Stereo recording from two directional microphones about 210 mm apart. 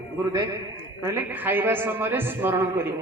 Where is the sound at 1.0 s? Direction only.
10° right (ahead or behind).